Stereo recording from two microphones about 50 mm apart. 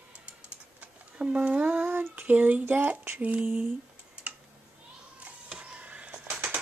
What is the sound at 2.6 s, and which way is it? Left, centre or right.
Speech, right.